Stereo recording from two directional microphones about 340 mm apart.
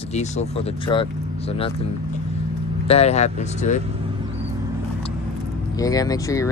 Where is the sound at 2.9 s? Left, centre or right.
Centre.